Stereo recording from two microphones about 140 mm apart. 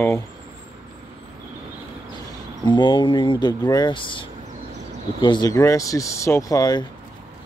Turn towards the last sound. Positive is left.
turn(degrees=25)  # may be behind; listen again after turning